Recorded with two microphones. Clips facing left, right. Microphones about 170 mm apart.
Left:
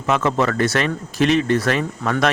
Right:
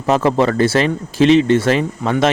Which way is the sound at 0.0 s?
35° right (ahead or behind).